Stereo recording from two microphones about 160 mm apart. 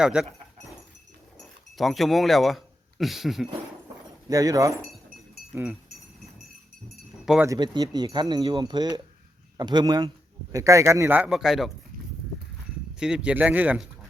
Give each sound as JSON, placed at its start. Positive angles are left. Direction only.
{"t": 0.0, "sound": "speech", "side_deg": -5}
{"t": 1.4, "sound": "speech", "side_deg": 0}
{"t": 4.3, "sound": "speech", "side_deg": -20}
{"t": 7.4, "sound": "a man's voice", "side_deg": -25}
{"t": 13.0, "sound": "a man's voice", "side_deg": -5}